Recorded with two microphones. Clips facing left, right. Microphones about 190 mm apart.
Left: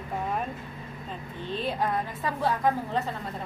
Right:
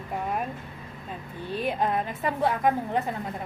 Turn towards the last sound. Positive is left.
turn(degrees=-15)  # may be behind; listen again after turning